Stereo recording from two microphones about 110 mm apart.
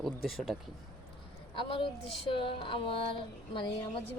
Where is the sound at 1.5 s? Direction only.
50° left (ahead or behind).